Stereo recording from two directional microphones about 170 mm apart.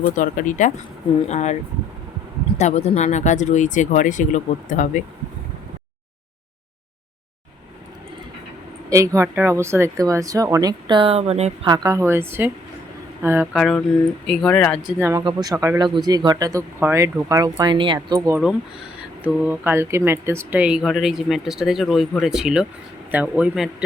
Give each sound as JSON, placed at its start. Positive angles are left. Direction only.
{"t": 0.1, "sound": "speech", "side_deg": 50}
{"t": 2.6, "sound": "speech", "side_deg": 40}
{"t": 8.9, "sound": "speech", "side_deg": -15}
{"t": 11.6, "sound": "a woman's voice", "side_deg": -25}
{"t": 13.5, "sound": "speech", "side_deg": 0}
{"t": 14.9, "sound": "a woman's voice", "side_deg": -15}
{"t": 15.2, "sound": "speech", "side_deg": -25}
{"t": 18.3, "sound": "a woman's voice", "side_deg": -5}